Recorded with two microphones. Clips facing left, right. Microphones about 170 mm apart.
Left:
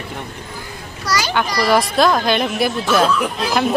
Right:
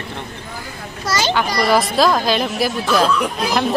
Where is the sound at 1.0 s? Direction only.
25° right (ahead or behind).